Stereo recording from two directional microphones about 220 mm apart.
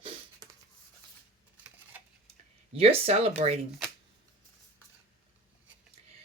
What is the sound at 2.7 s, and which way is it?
Speech, 25° right (ahead or behind).